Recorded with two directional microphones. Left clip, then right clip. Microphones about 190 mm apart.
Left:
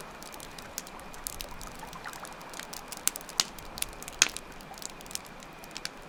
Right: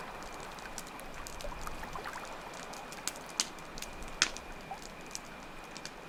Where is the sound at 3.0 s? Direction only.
45° left (ahead or behind).